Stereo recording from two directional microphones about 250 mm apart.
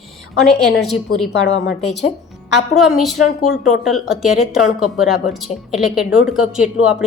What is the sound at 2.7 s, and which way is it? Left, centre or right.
A woman's voice, centre.